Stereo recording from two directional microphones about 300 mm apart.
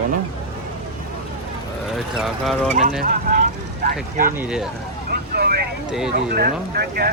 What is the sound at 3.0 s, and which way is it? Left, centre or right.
Speech, right.